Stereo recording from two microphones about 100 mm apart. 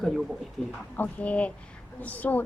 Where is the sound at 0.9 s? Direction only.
15° left (ahead or behind).